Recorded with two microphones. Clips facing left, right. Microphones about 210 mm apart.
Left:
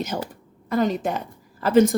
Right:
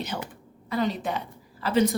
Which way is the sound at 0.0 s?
45° left (ahead or behind).